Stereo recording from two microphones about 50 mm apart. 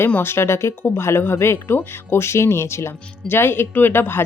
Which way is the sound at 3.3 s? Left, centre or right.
Left.